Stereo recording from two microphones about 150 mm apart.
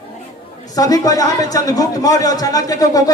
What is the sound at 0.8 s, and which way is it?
A man's voice, 25° left (ahead or behind).